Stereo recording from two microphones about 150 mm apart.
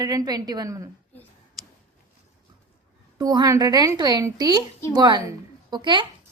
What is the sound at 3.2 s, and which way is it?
A woman's voice, 25° right (ahead or behind).